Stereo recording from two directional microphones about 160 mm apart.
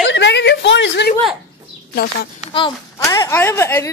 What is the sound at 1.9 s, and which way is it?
Speech, 75° left (ahead or behind).